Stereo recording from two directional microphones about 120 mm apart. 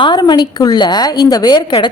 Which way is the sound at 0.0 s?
40° left (ahead or behind).